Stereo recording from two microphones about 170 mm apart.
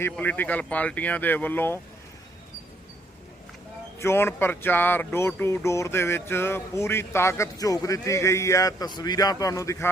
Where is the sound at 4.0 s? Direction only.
15° left (ahead or behind).